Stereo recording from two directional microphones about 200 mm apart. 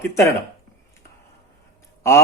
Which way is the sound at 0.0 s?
15° left (ahead or behind).